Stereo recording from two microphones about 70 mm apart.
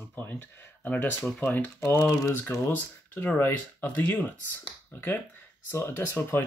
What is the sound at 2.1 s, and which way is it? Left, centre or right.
Speech, left.